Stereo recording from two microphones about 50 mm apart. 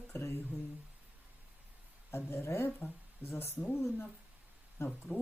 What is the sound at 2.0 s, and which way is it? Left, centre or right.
A woman's voice, left.